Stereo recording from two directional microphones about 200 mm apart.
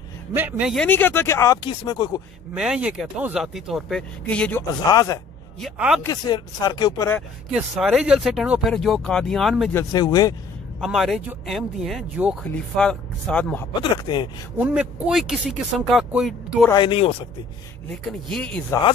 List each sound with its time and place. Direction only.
0.3 s speech: 10° right (ahead or behind)
0.8 s speech: 10° left (ahead or behind)
2.5 s speech: 5° right (ahead or behind)
4.8 s speech: 20° left (ahead or behind)
5.6 s speech: 5° right (ahead or behind)
6.0 s speech: 20° left (ahead or behind)
7.8 s speech: centre (ahead or behind)
9.8 s speech: 20° left (ahead or behind)
10.8 s speech: centre (ahead or behind)
14.0 s speech: 25° left (ahead or behind)
14.6 s speech: 5° right (ahead or behind)
16.7 s speech: 25° left (ahead or behind)
17.8 s speech: 5° left (ahead or behind)